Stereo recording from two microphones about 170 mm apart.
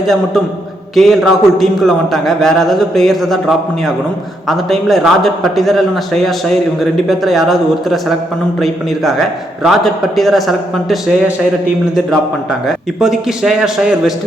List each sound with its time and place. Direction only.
0.0 s a man's voice: centre (ahead or behind)
4.4 s a man's voice: centre (ahead or behind)
12.6 s a man's voice: centre (ahead or behind)